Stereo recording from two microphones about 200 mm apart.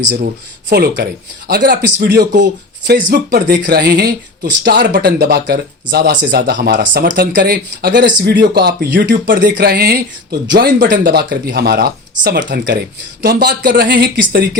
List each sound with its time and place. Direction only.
0.0 s speech: 60° right (ahead or behind)
10.4 s speech: 65° right (ahead or behind)
10.8 s speech: 45° right (ahead or behind)
13.2 s speech: 45° right (ahead or behind)